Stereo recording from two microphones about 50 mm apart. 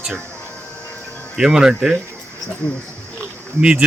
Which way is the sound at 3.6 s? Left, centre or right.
Centre.